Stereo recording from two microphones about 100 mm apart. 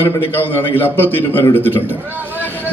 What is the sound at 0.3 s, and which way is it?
A man's voice, 20° left (ahead or behind).